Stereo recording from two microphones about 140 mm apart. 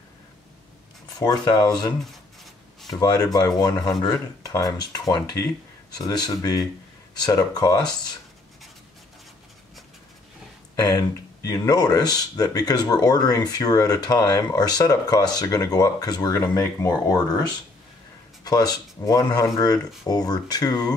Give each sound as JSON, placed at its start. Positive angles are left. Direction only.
{"t": 1.2, "sound": "speech", "side_deg": 15}
{"t": 2.9, "sound": "speech", "side_deg": 25}
{"t": 10.8, "sound": "speech", "side_deg": 25}